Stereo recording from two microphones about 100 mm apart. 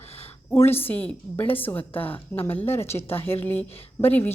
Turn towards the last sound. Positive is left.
turn(degrees=20)  # may be behind; listen again after turning